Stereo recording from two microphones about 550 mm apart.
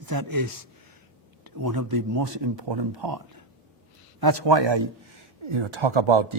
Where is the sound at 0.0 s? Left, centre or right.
Right.